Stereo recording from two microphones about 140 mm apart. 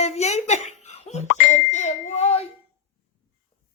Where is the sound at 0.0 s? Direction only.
50° left (ahead or behind).